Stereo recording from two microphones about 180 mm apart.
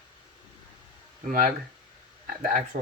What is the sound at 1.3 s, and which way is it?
Speech, 50° right (ahead or behind).